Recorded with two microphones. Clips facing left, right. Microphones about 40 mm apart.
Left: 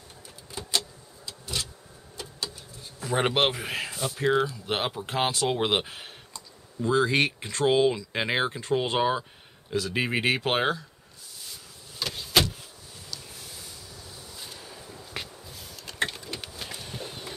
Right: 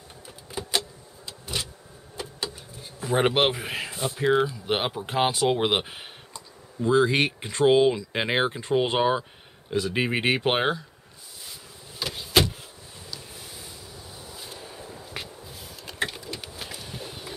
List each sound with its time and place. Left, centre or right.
0.5 s vehicle: centre
2.1 s speech: centre
12.0 s vehicle: centre
15.1 s a sound: centre